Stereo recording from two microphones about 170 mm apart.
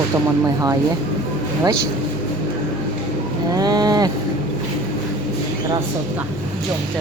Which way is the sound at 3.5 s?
25° right (ahead or behind).